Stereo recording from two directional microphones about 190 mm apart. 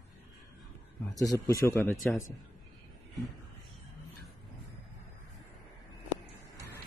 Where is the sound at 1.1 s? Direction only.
20° left (ahead or behind).